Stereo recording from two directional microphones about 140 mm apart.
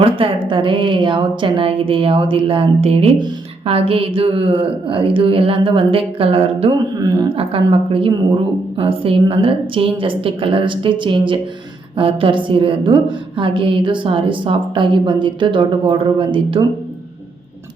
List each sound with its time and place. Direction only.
0.0 s a woman's voice: 40° right (ahead or behind)
7.0 s a woman's voice: 25° right (ahead or behind)
7.3 s a woman's voice: 40° right (ahead or behind)